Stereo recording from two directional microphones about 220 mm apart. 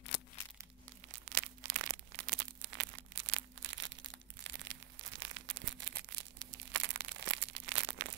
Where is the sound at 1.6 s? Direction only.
35° right (ahead or behind).